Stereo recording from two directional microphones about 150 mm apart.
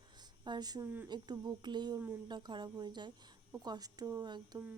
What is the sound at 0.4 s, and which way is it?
Speech, 30° right (ahead or behind).